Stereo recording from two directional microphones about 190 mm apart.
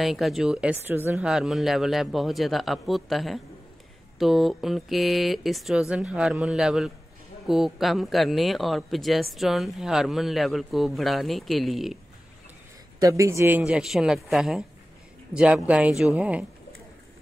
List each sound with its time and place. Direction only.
0.0 s speech: centre (ahead or behind)
13.0 s speech: 15° right (ahead or behind)
13.6 s speech: 5° right (ahead or behind)